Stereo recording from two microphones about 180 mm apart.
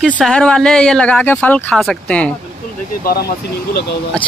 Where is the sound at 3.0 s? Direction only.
60° left (ahead or behind).